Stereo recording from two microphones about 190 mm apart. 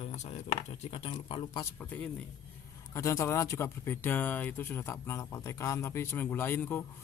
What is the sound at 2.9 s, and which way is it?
Speech, 15° left (ahead or behind).